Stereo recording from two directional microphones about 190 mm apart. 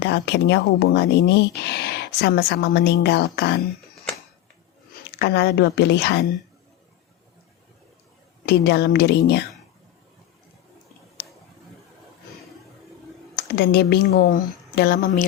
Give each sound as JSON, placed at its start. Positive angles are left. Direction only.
{"t": 0.0, "sound": "speech", "side_deg": 60}
{"t": 5.0, "sound": "speech", "side_deg": 60}
{"t": 8.4, "sound": "speech", "side_deg": 60}
{"t": 13.3, "sound": "speech", "side_deg": 60}